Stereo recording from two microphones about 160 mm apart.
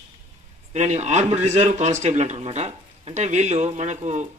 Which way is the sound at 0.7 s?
45° right (ahead or behind).